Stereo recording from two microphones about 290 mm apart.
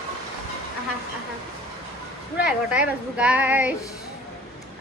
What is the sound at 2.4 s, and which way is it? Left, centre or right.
Speech, centre.